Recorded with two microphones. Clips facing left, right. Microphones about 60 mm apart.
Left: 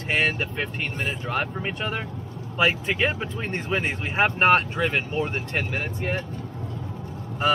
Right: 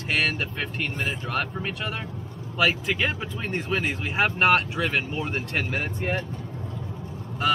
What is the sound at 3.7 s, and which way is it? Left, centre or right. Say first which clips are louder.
Speech: left 1 dB; centre.